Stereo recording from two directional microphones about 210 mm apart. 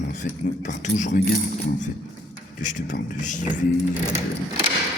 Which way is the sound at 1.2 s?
35° left (ahead or behind).